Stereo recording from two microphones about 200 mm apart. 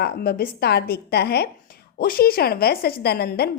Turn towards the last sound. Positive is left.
turn(degrees=50)  # may be behind; listen again after turning